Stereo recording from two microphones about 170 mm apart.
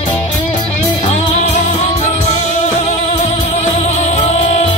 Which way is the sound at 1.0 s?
45° left (ahead or behind).